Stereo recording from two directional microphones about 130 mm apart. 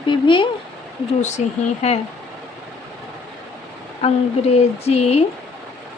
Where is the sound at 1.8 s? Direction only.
55° left (ahead or behind).